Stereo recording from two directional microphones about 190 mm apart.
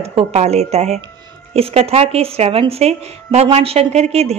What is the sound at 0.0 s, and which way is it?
A woman's voice, 35° right (ahead or behind).